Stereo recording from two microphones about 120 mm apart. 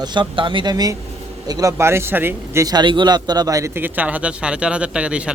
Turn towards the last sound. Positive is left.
turn(degrees=-10)  # may be behind; listen again after turning